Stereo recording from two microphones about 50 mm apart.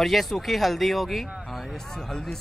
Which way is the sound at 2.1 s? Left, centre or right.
Centre.